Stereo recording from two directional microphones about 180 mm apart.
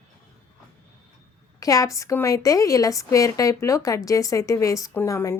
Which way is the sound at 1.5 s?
20° left (ahead or behind).